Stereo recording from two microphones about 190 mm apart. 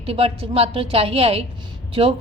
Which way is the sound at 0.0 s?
30° right (ahead or behind).